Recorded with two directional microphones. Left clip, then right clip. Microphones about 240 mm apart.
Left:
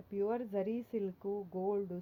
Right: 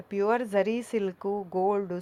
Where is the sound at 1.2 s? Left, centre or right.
Right.